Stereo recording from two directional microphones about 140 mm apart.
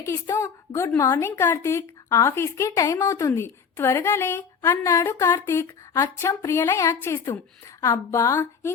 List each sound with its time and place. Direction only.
0.0 s a woman's voice: 20° left (ahead or behind)